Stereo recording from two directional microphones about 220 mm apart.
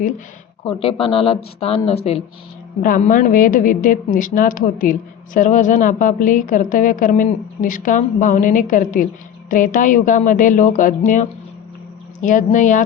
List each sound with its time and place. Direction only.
0.6 s a woman's voice: 25° left (ahead or behind)